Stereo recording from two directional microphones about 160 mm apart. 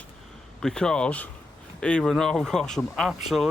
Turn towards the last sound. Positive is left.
turn(degrees=0)  # may be behind; listen again after turning